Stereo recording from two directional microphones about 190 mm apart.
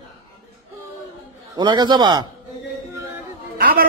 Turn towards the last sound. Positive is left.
turn(degrees=-50)  # may be behind; listen again after turning